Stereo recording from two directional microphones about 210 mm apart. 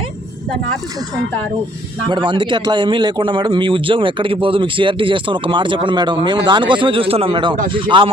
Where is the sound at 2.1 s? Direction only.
20° right (ahead or behind).